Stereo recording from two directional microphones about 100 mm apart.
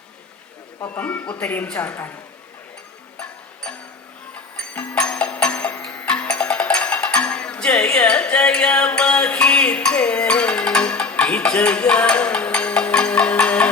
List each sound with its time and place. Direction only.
0.9 s speech: 15° left (ahead or behind)
3.2 s music: 10° left (ahead or behind)